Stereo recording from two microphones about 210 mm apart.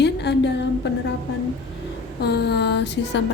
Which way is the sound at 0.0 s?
55° left (ahead or behind).